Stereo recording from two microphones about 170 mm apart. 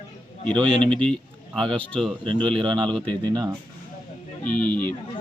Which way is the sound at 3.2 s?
25° right (ahead or behind).